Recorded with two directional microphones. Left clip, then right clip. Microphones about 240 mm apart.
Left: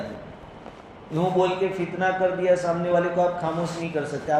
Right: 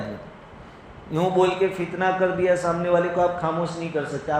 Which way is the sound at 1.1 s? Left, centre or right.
Right.